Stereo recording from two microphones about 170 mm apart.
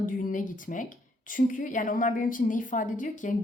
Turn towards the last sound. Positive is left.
turn(degrees=50)  # may be behind; listen again after turning